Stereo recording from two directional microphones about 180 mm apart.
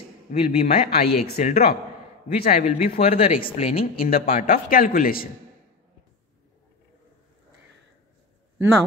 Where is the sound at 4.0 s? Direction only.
55° left (ahead or behind).